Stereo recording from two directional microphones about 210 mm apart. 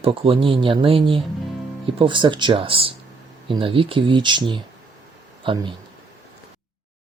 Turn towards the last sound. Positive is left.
turn(degrees=-25)  # may be behind; listen again after turning